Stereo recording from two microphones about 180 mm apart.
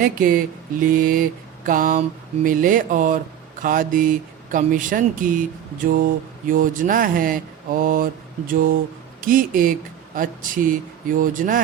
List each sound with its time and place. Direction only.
0.0 s mantra: 50° right (ahead or behind)